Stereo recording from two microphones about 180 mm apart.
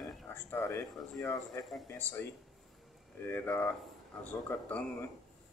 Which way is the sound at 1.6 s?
5° left (ahead or behind).